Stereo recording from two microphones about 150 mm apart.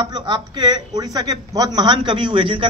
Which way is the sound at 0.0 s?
30° right (ahead or behind).